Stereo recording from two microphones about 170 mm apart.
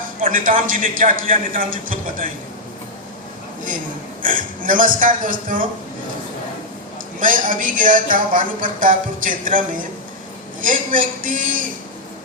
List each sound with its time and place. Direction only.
0.2 s speech: 55° right (ahead or behind)
4.2 s speech: 50° right (ahead or behind)
7.2 s speech: 50° right (ahead or behind)